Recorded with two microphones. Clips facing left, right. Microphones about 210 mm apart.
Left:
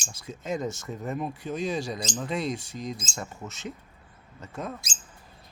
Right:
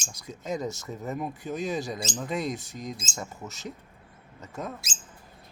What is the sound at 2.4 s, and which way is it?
Speech, 20° right (ahead or behind).